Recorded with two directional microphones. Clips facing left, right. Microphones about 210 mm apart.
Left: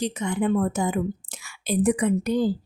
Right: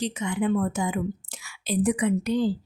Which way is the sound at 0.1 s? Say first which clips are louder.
Left 1 dB; 40° left (ahead or behind).